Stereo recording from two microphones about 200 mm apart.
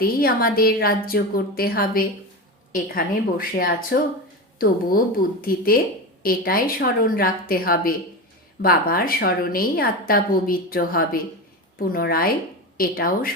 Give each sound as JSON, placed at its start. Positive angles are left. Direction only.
{"t": 0.0, "sound": "a woman's voice", "side_deg": 50}